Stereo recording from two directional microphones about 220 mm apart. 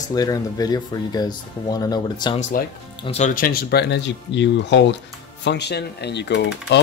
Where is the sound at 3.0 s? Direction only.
30° left (ahead or behind).